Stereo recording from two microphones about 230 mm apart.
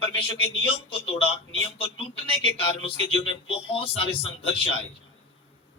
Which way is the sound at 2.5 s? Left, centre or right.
Left.